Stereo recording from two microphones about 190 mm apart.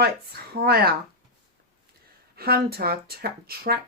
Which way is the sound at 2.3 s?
55° right (ahead or behind).